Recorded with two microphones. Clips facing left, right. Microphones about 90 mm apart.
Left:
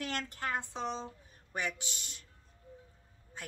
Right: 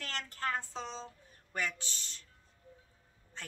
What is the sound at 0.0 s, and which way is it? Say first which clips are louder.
Speech: left 1 dB; 15° left (ahead or behind).